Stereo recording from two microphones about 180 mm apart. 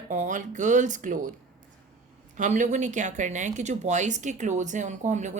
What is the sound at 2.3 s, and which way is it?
Speech, 45° right (ahead or behind).